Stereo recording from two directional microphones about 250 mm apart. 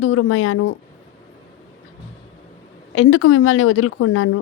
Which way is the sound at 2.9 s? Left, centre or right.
Left.